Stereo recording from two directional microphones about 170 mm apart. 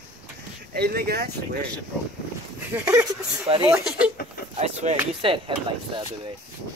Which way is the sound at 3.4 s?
35° right (ahead or behind).